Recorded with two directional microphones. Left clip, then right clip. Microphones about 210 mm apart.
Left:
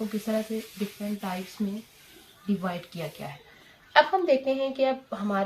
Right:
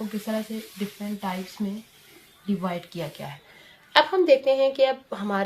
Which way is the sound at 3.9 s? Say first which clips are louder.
Right 3 dB; 45° right (ahead or behind).